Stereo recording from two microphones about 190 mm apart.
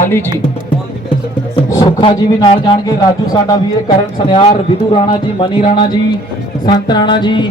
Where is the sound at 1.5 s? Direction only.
20° left (ahead or behind).